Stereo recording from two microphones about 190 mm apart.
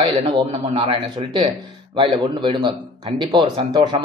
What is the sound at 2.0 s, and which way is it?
Speech, 25° right (ahead or behind).